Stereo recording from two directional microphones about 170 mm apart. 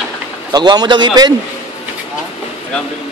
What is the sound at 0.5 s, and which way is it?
Speech, 25° right (ahead or behind).